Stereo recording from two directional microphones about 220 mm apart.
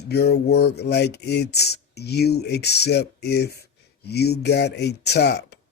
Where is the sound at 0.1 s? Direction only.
45° left (ahead or behind).